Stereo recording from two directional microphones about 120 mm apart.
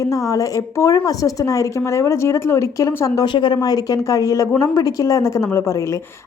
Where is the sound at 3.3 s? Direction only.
40° left (ahead or behind); by 6.0 s 25° left (ahead or behind).